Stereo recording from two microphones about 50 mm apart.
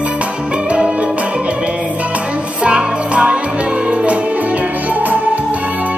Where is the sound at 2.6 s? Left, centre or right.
Right.